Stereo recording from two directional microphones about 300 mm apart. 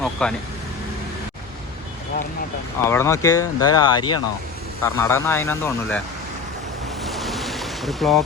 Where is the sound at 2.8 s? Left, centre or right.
Centre.